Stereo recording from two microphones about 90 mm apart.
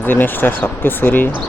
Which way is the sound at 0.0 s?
25° left (ahead or behind).